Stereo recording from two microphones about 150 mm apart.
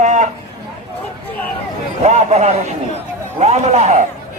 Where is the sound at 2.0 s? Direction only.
45° right (ahead or behind).